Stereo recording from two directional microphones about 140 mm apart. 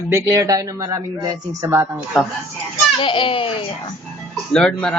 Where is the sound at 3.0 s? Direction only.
35° left (ahead or behind).